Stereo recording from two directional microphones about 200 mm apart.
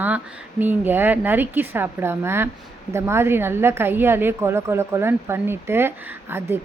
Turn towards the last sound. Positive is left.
turn(degrees=-10)  # may be behind; listen again after turning